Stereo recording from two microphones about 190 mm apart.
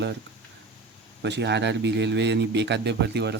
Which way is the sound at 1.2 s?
65° right (ahead or behind).